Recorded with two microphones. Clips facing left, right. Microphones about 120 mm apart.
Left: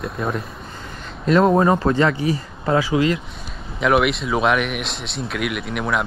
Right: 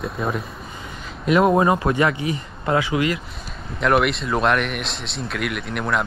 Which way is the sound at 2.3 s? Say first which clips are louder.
Left 2 dB; 30° left (ahead or behind).